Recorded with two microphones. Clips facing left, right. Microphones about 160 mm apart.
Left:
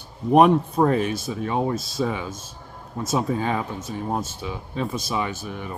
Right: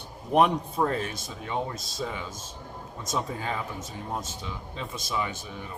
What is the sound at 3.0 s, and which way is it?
Speech, 65° left (ahead or behind).